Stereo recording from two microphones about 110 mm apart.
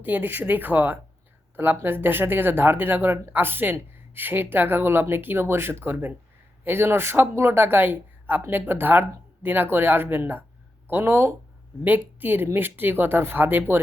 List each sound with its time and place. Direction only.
0.0 s speech: 15° right (ahead or behind)